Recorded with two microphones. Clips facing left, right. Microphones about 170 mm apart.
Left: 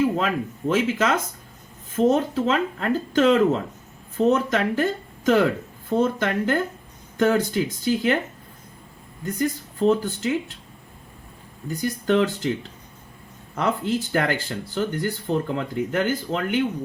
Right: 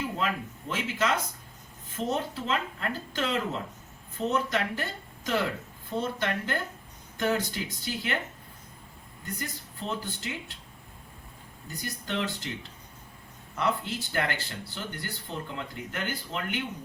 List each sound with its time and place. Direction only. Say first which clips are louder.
0.0 s a sound: left 9 dB; 75° left (ahead or behind)
0.7 s speech: left 8 dB; 50° left (ahead or behind)
9.2 s speech: left 13 dB; 45° left (ahead or behind)
11.8 s speech: left 12 dB; 45° left (ahead or behind)
13.6 s speech: left 6 dB; 45° left (ahead or behind)